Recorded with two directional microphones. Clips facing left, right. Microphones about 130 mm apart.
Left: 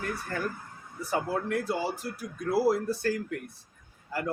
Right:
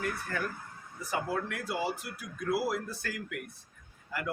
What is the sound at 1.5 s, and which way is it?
A man's voice, 30° left (ahead or behind).